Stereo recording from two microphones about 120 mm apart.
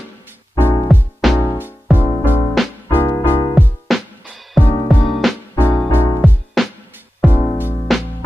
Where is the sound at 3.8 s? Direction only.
Centre (ahead or behind).